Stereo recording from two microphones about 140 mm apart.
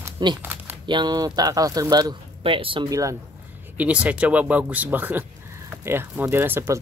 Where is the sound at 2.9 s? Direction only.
25° right (ahead or behind).